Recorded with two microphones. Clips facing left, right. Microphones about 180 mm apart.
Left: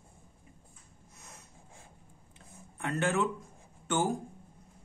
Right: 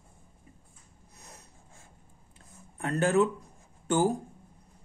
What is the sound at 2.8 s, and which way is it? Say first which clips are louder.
Speech: right 5 dB; 35° right (ahead or behind).